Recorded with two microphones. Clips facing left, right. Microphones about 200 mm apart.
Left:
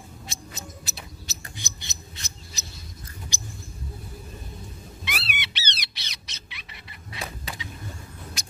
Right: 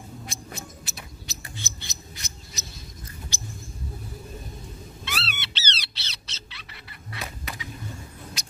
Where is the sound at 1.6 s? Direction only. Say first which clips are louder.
Right 1 dB; 15° left (ahead or behind).